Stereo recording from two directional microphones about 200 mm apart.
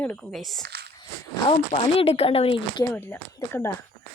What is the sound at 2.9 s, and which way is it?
Speech, 10° left (ahead or behind).